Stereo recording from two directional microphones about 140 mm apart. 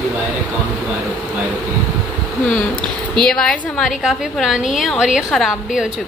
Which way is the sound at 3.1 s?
5° left (ahead or behind).